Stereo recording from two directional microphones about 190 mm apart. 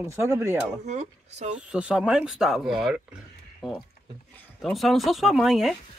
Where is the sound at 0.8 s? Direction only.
35° right (ahead or behind).